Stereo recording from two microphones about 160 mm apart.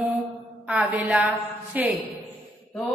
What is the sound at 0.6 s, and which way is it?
A woman's voice, 10° right (ahead or behind).